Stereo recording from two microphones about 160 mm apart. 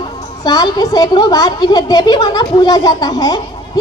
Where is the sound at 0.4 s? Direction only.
25° left (ahead or behind).